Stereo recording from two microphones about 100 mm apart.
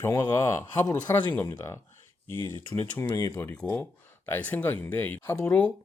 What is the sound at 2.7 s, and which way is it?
Speech, 20° left (ahead or behind).